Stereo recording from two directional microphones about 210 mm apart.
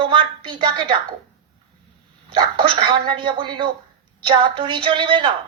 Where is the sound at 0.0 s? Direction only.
25° right (ahead or behind).